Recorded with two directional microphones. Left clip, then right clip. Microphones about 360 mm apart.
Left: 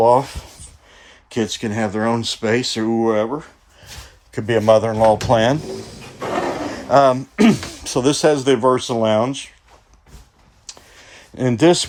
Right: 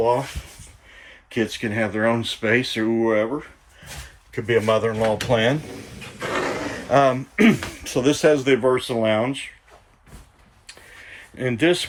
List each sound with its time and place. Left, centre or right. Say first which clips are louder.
1.3 s speech: left 2 dB; centre
4.4 s speech: left 5 dB; centre
6.1 s a sound: left 3 dB; centre
6.9 s speech: left 4 dB; centre
11.1 s speech: left 5 dB; centre